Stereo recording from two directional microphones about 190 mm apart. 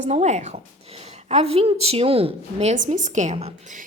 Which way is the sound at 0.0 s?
35° right (ahead or behind).